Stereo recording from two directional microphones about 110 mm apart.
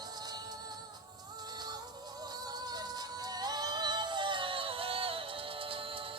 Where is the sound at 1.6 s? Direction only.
40° right (ahead or behind).